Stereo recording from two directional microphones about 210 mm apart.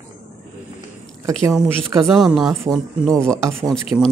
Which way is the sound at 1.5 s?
Centre (ahead or behind).